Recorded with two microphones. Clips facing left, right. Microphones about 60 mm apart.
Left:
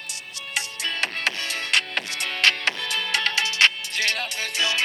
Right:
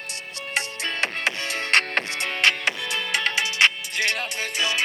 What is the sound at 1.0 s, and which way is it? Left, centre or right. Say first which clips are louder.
Music: right 1 dB; right.